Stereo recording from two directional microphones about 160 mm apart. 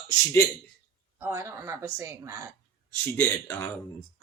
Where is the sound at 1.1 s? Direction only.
15° right (ahead or behind).